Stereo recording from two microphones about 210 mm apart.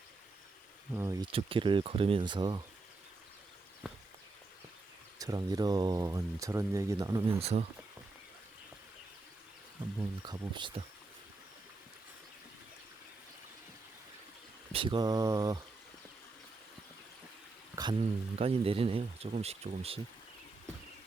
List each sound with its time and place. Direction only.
0.9 s speech: 15° right (ahead or behind)
1.3 s speech: 25° right (ahead or behind)
5.2 s speech: 20° right (ahead or behind)
7.3 s speech: 30° right (ahead or behind)
10.0 s speech: 20° right (ahead or behind)
14.7 s speech: 25° right (ahead or behind)
17.8 s speech: 15° right (ahead or behind)
18.3 s speech: 30° right (ahead or behind)